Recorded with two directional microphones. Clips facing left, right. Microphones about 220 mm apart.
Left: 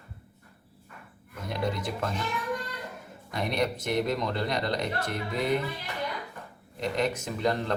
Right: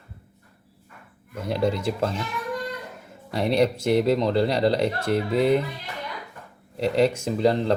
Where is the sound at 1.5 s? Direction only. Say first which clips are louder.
Right 7 dB; 30° right (ahead or behind).